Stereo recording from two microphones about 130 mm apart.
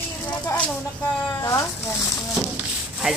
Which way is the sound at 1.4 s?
25° left (ahead or behind).